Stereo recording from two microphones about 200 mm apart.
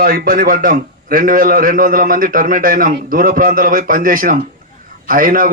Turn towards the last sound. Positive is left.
turn(degrees=-45)  # may be behind; listen again after turning